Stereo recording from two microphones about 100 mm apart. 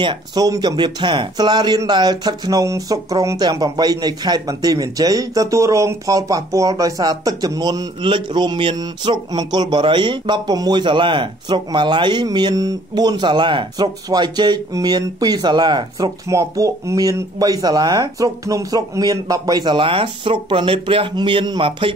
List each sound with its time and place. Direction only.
0.0 s speech: 50° right (ahead or behind)
8.0 s speech: 55° right (ahead or behind)
16.3 s speech: 30° right (ahead or behind); by 21.9 s 60° right (ahead or behind)